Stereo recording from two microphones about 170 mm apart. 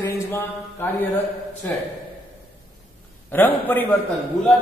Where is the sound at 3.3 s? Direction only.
10° left (ahead or behind).